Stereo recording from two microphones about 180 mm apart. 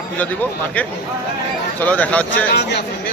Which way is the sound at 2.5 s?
65° left (ahead or behind).